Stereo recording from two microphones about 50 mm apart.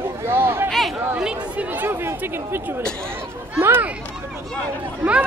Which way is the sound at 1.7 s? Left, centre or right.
Right.